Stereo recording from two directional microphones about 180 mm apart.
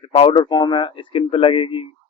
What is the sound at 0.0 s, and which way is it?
Speech, 30° left (ahead or behind).